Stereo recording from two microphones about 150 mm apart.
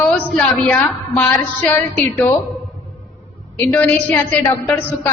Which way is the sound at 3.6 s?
15° left (ahead or behind).